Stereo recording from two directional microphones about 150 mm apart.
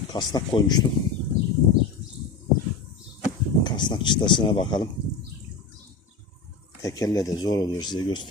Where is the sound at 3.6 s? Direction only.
30° left (ahead or behind).